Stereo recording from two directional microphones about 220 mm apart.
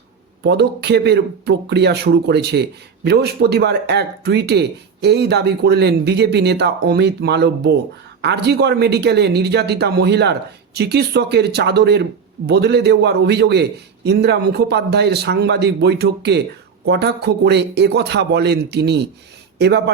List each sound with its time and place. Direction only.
0.4 s speech: 50° right (ahead or behind)